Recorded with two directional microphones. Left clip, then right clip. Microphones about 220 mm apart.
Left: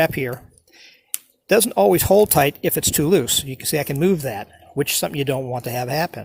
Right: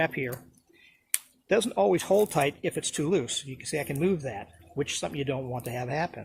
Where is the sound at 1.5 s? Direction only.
40° left (ahead or behind).